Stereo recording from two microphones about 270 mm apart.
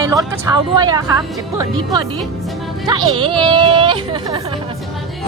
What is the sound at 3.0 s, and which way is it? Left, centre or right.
Speech, right.